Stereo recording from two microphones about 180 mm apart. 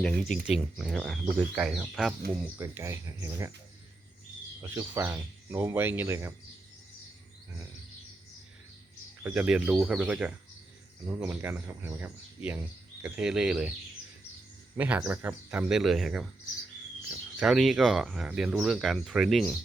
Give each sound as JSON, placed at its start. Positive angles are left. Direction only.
{"t": 0.0, "sound": "speech", "side_deg": 5}
{"t": 2.6, "sound": "speech", "side_deg": -15}
{"t": 4.7, "sound": "speech", "side_deg": -15}
{"t": 9.2, "sound": "speech", "side_deg": -5}
{"t": 14.8, "sound": "speech", "side_deg": -10}
{"t": 17.3, "sound": "speech", "side_deg": 0}